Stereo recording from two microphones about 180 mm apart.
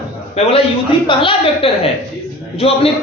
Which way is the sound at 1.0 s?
30° left (ahead or behind).